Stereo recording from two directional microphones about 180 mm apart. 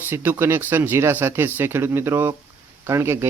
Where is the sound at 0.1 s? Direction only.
10° right (ahead or behind).